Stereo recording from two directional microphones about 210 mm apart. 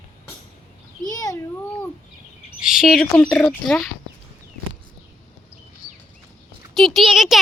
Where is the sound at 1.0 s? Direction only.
15° left (ahead or behind).